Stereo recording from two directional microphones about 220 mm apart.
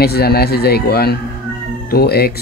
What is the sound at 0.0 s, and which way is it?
Speech, 45° left (ahead or behind).